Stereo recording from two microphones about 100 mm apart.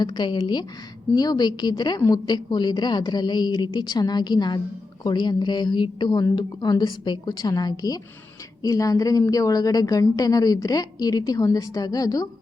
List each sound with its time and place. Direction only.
0.0 s a woman's voice: 45° left (ahead or behind)